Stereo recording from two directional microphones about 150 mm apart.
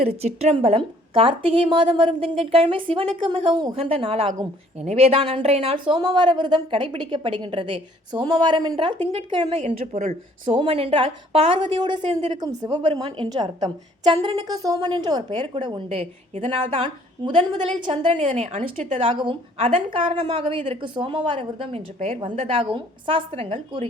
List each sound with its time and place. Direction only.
0.0 s a woman's voice: 45° right (ahead or behind)
9.8 s a woman's voice: 55° right (ahead or behind)
10.5 s speech: 35° right (ahead or behind)
18.3 s speech: 50° right (ahead or behind)